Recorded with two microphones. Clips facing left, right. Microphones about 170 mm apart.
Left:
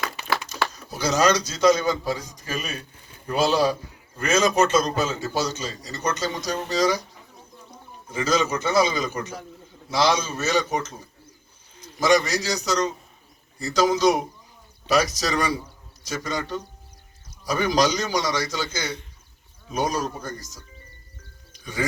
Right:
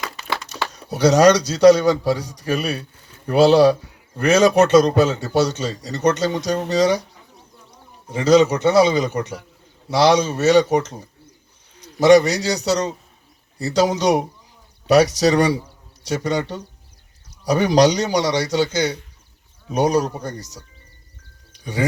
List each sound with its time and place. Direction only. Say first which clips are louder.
0.9 s a man's voice: right 8 dB; 70° right (ahead or behind)
8.1 s a man's voice: right 9 dB; 70° right (ahead or behind)
13.6 s a man's voice: right 2 dB; 70° right (ahead or behind)
21.5 s a sound: right 5 dB; 70° right (ahead or behind)